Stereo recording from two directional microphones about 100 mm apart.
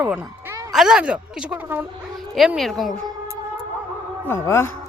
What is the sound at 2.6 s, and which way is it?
Speech, centre (ahead or behind).